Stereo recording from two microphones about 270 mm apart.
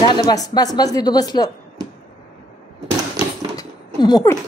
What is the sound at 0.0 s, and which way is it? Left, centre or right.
Speech, centre.